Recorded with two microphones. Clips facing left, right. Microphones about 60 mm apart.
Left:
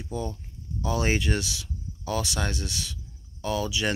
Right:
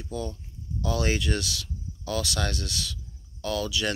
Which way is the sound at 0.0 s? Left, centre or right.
Left.